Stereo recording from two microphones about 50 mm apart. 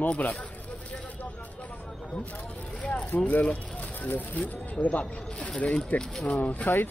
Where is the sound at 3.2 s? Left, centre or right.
Left.